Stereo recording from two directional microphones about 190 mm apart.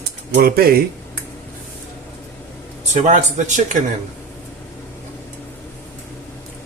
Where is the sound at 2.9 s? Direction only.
40° right (ahead or behind).